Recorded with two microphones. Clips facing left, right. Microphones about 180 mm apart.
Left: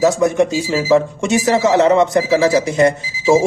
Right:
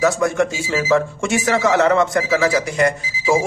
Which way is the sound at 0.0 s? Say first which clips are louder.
Left 4 dB; 20° left (ahead or behind).